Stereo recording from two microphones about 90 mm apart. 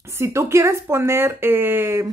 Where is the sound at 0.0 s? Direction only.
30° right (ahead or behind).